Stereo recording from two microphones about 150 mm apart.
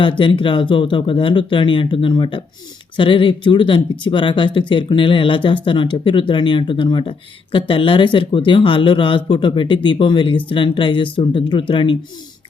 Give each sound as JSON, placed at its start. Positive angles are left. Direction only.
{"t": 0.0, "sound": "speech", "side_deg": 35}